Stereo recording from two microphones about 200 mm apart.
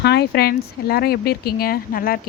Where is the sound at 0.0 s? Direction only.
55° left (ahead or behind).